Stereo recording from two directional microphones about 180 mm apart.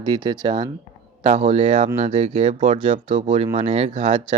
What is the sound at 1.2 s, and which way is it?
Speech, 40° right (ahead or behind).